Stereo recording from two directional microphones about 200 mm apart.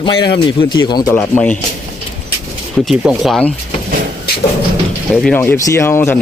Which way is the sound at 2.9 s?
Centre (ahead or behind).